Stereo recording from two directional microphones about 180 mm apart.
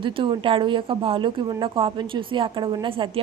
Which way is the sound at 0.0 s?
30° right (ahead or behind).